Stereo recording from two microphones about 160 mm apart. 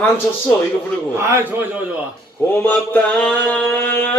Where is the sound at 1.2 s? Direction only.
15° right (ahead or behind).